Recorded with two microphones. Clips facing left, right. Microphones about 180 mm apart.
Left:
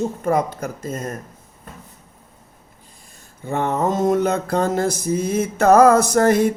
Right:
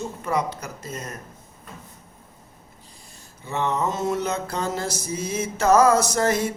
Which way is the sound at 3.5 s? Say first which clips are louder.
Left 4 dB; 50° left (ahead or behind).